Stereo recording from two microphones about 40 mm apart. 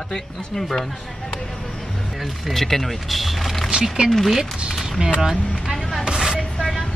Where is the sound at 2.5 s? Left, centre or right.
Centre.